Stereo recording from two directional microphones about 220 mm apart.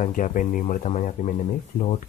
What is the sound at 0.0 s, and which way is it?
Speech, 35° left (ahead or behind).